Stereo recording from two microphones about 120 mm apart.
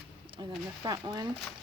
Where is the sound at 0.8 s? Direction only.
35° right (ahead or behind).